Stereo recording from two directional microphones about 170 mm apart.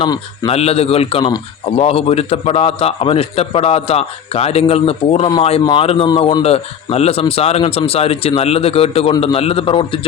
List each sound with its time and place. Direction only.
0.0 s a man's voice: 30° left (ahead or behind)